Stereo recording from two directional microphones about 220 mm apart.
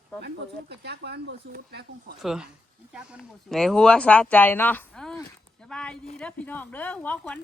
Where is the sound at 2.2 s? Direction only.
Centre (ahead or behind).